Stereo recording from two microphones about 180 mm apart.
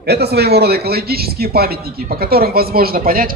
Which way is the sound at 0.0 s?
65° right (ahead or behind).